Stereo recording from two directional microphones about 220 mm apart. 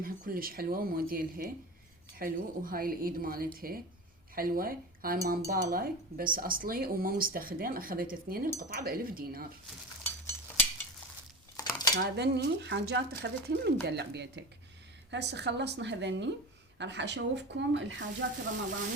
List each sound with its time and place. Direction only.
0.0 s speech: 40° right (ahead or behind)
10.0 s a sound: 10° left (ahead or behind)
11.5 s dishes: 20° left (ahead or behind)
11.9 s speech: 50° right (ahead or behind)